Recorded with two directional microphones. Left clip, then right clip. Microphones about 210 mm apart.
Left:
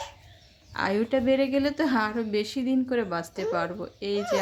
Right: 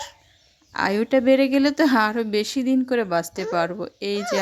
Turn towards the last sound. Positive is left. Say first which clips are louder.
# right 3 dB
turn(degrees=-35)  # may be behind; listen again after turning